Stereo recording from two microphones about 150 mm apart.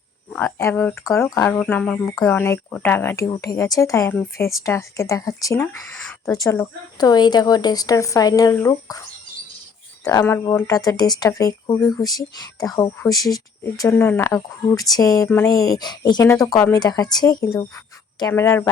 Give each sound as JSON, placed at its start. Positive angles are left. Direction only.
{"t": 0.3, "sound": "speech", "side_deg": 10}
{"t": 1.5, "sound": "speech", "side_deg": 10}